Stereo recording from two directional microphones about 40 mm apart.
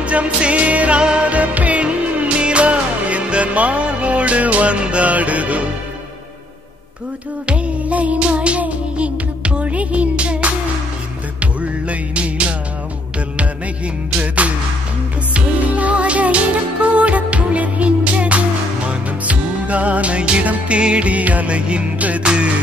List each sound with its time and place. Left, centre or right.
0.0 s music: right
7.4 s music: right
14.2 s music: right
22.2 s music: right